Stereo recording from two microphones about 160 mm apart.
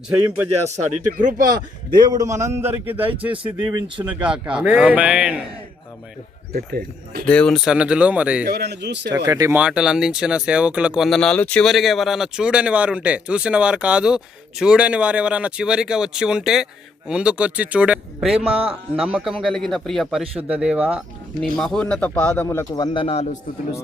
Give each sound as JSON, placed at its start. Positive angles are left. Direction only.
{"t": 0.1, "sound": "speech", "side_deg": -5}
{"t": 1.1, "sound": "speech", "side_deg": -55}
{"t": 2.0, "sound": "speech", "side_deg": -25}
{"t": 3.3, "sound": "a man's voice", "side_deg": -35}
{"t": 4.0, "sound": "speech", "side_deg": -10}
{"t": 6.5, "sound": "speech", "side_deg": -70}
{"t": 7.3, "sound": "speech", "side_deg": 5}
{"t": 8.4, "sound": "speech", "side_deg": -85}
{"t": 9.0, "sound": "speech", "side_deg": -20}
{"t": 9.6, "sound": "speech", "side_deg": -5}
{"t": 18.3, "sound": "a man's voice", "side_deg": -35}
{"t": 18.9, "sound": "speech", "side_deg": -5}
{"t": 21.4, "sound": "speech", "side_deg": 0}